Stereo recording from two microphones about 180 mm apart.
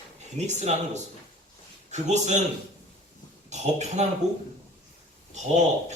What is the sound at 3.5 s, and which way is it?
Speech, 40° right (ahead or behind).